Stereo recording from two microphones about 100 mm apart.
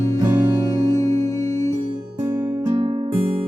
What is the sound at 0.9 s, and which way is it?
Music, 30° left (ahead or behind).